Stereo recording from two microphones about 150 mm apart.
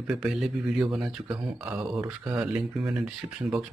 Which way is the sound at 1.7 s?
5° right (ahead or behind).